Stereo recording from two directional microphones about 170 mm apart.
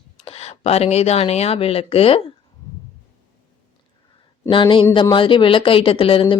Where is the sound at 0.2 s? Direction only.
35° left (ahead or behind).